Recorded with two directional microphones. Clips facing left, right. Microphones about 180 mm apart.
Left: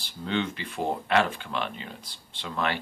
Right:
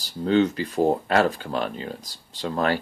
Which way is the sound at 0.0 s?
40° right (ahead or behind).